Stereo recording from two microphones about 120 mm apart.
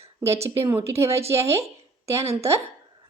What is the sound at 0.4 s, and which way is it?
Speech, 20° right (ahead or behind).